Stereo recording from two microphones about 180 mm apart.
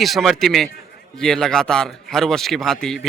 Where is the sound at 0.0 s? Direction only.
Centre (ahead or behind).